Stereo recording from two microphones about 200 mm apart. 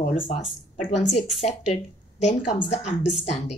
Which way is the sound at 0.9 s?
35° left (ahead or behind).